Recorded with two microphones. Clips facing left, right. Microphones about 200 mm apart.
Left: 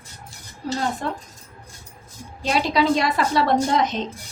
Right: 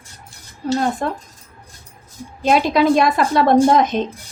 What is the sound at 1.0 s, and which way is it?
Speech, 55° right (ahead or behind).